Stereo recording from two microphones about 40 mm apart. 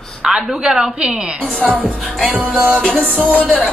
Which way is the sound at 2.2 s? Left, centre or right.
Right.